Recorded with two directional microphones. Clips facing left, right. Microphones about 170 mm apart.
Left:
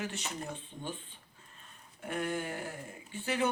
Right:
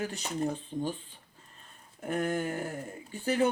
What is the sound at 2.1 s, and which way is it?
Speech, 45° right (ahead or behind).